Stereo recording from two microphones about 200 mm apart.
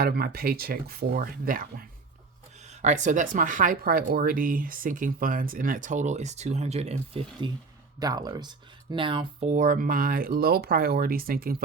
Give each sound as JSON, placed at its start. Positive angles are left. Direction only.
{"t": 0.0, "sound": "speech", "side_deg": -50}